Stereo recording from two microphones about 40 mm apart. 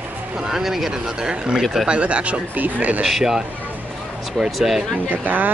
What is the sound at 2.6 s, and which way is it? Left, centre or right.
Speech, right.